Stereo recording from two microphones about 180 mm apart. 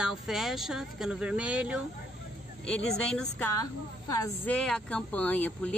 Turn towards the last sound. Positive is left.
turn(degrees=10)  # may be behind; listen again after turning